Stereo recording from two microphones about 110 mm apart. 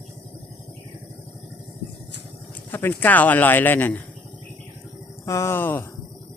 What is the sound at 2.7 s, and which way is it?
Speech, 15° left (ahead or behind).